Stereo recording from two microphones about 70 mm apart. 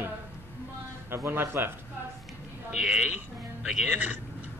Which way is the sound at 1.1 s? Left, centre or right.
Right.